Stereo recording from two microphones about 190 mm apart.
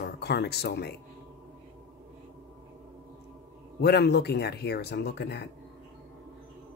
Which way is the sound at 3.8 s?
60° left (ahead or behind).